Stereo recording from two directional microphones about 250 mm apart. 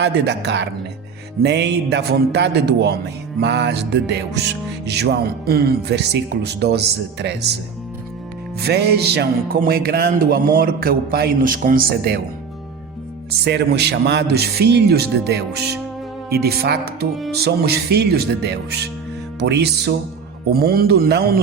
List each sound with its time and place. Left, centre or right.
0.0 s speech: right
1.4 s music: right
8.6 s music: right
13.4 s music: right